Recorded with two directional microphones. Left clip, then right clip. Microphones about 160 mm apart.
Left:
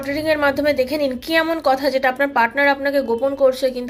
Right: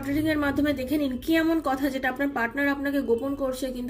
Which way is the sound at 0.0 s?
15° right (ahead or behind).